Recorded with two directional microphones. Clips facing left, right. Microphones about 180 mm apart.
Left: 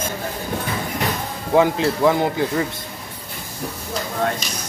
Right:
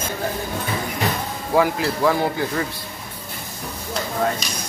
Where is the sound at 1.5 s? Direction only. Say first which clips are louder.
Left 3 dB; 20° left (ahead or behind).